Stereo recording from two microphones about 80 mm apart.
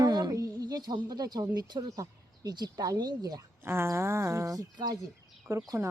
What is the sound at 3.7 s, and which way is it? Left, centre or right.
Speech, right.